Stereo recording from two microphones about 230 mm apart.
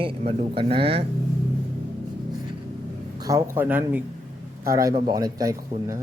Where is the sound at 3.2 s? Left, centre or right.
Centre.